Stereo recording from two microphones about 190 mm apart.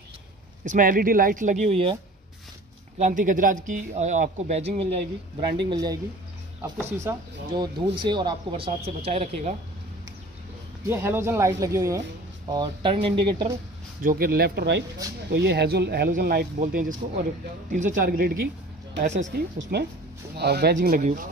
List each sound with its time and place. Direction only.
0.7 s speech: 45° right (ahead or behind); by 2.0 s 30° right (ahead or behind)
3.0 s speech: 45° right (ahead or behind)
5.7 s speech: 20° right (ahead or behind); by 9.6 s 35° right (ahead or behind)
10.9 s speech: 10° right (ahead or behind)
14.0 s speech: 50° right (ahead or behind)
16.6 s speech: 45° right (ahead or behind)
18.9 s speech: 40° right (ahead or behind)
19.3 s speech: 60° right (ahead or behind)